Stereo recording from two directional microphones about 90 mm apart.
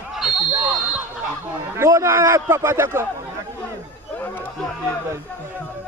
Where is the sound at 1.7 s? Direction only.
30° right (ahead or behind).